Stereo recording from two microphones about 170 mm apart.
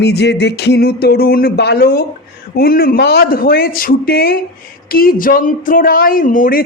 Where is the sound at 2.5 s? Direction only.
60° left (ahead or behind).